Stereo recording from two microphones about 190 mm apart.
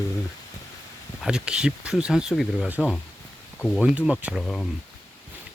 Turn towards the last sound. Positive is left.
turn(degrees=0)  # may be behind; listen again after turning